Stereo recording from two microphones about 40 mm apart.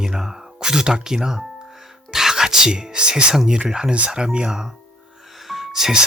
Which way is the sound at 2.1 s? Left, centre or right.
Centre.